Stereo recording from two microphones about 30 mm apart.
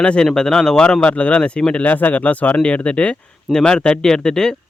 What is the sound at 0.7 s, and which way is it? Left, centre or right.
Speech, left.